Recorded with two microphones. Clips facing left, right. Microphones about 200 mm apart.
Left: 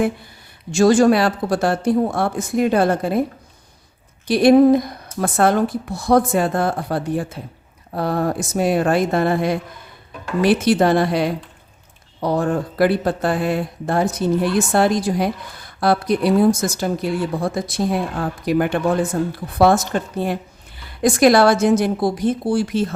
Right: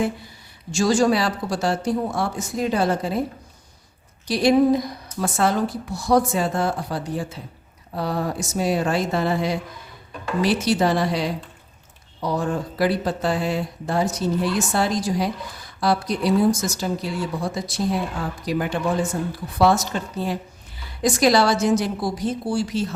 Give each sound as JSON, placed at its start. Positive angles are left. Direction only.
{"t": 0.7, "sound": "a woman's voice", "side_deg": 55}
{"t": 4.3, "sound": "a woman's voice", "side_deg": 55}